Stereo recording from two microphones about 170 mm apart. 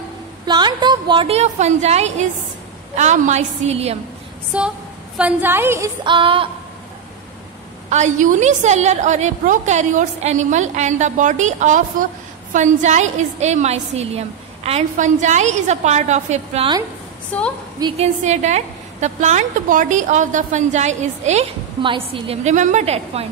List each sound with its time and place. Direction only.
0.5 s a woman's voice: 25° right (ahead or behind)
4.6 s a woman's voice: 5° right (ahead or behind)
6.0 s a woman's voice: 30° right (ahead or behind)
7.9 s a woman's voice: 45° right (ahead or behind)
17.3 s a woman's voice: 10° left (ahead or behind)
17.9 s a woman's voice: 40° right (ahead or behind)
21.8 s a woman's voice: 30° right (ahead or behind)